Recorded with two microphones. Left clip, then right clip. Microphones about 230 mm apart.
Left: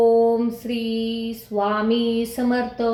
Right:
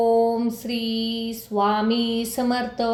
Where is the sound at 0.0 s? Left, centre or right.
Right.